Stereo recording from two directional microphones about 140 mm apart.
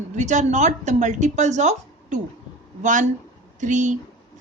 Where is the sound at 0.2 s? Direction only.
60° right (ahead or behind).